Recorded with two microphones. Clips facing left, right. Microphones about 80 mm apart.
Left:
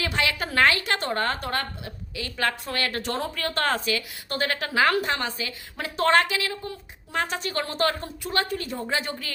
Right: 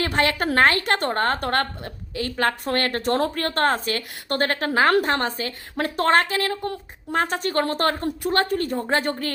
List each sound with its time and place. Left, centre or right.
0.0 s a woman's voice: right